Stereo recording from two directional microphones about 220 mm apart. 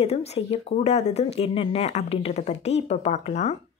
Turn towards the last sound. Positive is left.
turn(degrees=30)  # may be behind; listen again after turning